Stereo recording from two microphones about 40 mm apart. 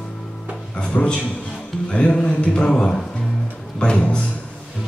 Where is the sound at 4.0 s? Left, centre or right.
Left.